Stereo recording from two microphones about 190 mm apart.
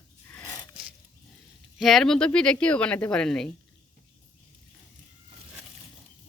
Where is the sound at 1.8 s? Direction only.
Centre (ahead or behind).